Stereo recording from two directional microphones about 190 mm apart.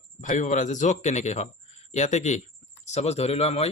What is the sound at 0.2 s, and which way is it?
A man's voice, 40° left (ahead or behind).